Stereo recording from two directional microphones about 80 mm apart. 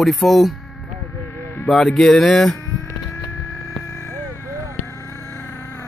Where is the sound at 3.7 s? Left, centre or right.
Left.